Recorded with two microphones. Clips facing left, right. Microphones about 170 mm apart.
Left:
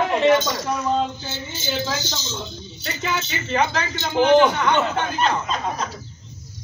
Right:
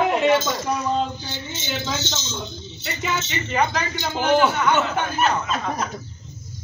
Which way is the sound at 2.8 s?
15° right (ahead or behind).